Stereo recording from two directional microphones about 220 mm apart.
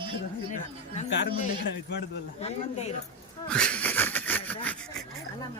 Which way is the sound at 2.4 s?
30° left (ahead or behind).